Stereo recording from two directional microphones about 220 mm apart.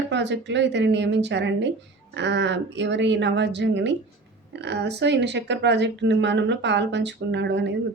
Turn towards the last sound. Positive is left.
turn(degrees=-55)  # may be behind; listen again after turning